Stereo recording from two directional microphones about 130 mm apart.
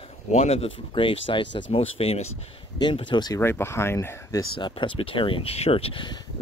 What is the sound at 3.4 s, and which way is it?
Speech, 20° left (ahead or behind).